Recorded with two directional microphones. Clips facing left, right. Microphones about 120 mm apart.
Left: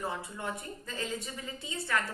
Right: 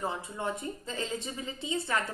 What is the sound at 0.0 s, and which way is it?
A woman's voice, 25° right (ahead or behind).